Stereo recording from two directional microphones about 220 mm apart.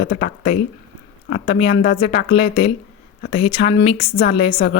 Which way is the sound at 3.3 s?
25° left (ahead or behind).